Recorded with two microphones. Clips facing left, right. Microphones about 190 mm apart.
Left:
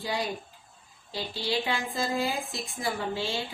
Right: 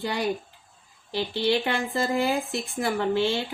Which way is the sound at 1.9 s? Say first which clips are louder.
Right 6 dB; 60° right (ahead or behind).